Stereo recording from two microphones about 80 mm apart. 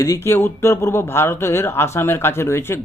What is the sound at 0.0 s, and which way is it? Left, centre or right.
Speech, left.